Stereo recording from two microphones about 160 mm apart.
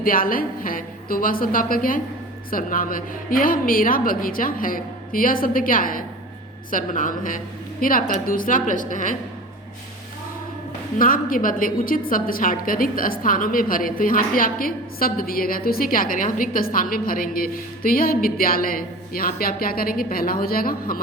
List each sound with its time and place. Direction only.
0.0 s a woman's voice: 60° left (ahead or behind)
10.9 s a woman's voice: 60° left (ahead or behind)